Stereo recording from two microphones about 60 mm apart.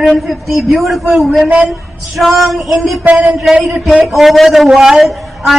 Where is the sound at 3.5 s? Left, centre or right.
Centre.